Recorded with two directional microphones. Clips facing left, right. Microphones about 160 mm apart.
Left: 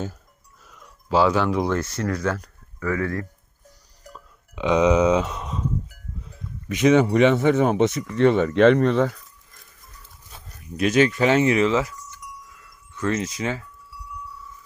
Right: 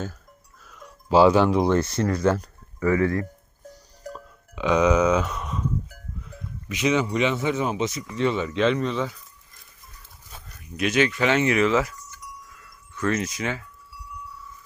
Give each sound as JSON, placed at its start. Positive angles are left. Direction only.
{"t": 1.1, "sound": "speech", "side_deg": -25}
{"t": 4.5, "sound": "speech", "side_deg": 20}
{"t": 6.7, "sound": "speech", "side_deg": 50}
{"t": 10.6, "sound": "speech", "side_deg": 35}
{"t": 12.5, "sound": "wind chime", "side_deg": 25}